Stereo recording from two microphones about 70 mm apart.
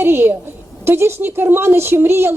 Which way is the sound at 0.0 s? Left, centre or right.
Right.